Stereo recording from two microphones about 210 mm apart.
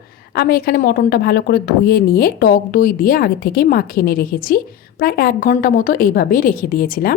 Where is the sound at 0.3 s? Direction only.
45° left (ahead or behind).